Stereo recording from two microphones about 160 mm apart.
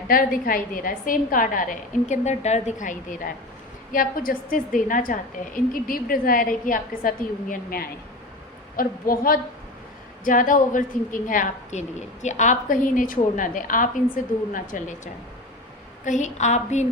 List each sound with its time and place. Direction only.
0.1 s a woman's voice: 60° left (ahead or behind)